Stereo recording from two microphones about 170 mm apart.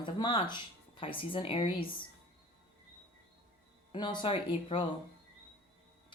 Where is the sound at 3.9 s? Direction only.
25° left (ahead or behind).